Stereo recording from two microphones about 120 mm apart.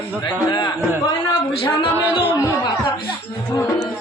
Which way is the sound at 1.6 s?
45° left (ahead or behind).